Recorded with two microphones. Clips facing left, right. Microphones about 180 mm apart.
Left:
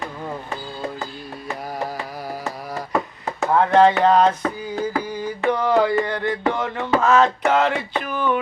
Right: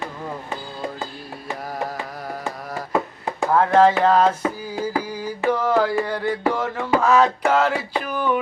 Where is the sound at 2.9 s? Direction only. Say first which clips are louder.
Right 1 dB; 15° right (ahead or behind).